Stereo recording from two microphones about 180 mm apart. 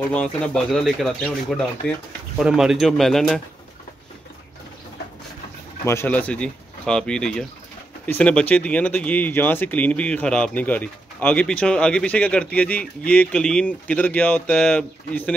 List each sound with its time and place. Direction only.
0.1 s speech: 5° left (ahead or behind)
5.9 s speech: 10° left (ahead or behind)